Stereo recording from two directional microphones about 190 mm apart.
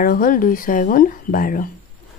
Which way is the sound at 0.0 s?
45° left (ahead or behind).